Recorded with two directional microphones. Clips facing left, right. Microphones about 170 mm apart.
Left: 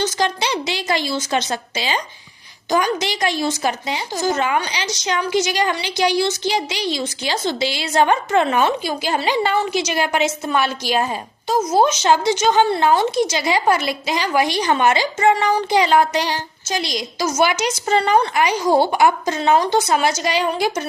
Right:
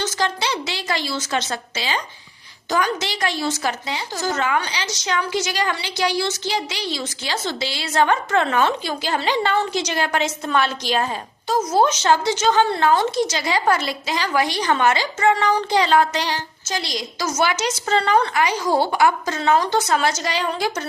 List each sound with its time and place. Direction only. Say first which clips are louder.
0.0 s speech: left 3 dB; 15° left (ahead or behind)